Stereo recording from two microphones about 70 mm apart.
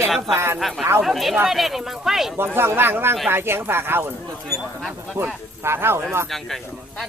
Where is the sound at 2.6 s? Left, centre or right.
Right.